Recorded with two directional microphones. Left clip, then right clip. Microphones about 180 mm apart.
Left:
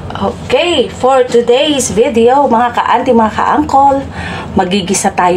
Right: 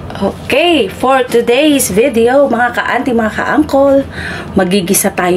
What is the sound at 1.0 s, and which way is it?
Speech, 70° right (ahead or behind).